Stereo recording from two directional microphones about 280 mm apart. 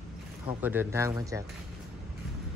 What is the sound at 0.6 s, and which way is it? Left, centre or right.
Speech, centre.